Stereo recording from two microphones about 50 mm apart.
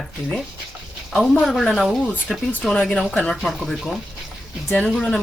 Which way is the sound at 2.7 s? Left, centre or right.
Left.